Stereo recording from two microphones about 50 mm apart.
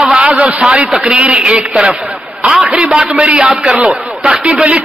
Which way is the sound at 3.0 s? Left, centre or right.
Right.